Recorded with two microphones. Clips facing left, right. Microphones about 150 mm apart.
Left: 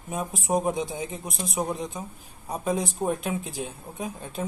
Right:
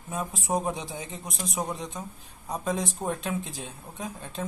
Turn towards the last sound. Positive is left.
turn(degrees=10)  # may be behind; listen again after turning